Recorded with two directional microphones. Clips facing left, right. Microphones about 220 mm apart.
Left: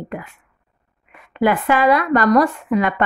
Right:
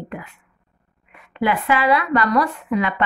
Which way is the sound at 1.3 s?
45° left (ahead or behind).